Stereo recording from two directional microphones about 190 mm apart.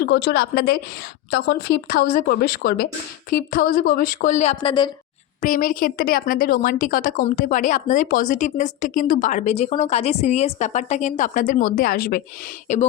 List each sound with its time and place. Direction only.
0.0 s a woman's voice: 65° left (ahead or behind); by 4.9 s 25° left (ahead or behind)
5.4 s speech: 45° left (ahead or behind)
12.6 s speech: 40° left (ahead or behind)